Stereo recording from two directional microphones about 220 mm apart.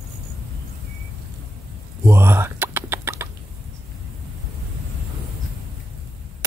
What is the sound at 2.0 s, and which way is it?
Chicken, 10° right (ahead or behind).